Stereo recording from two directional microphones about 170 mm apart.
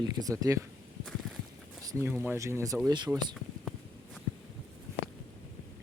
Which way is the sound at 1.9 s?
15° right (ahead or behind).